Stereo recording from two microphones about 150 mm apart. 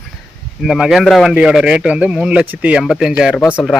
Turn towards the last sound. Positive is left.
turn(degrees=0)  # may be behind; listen again after turning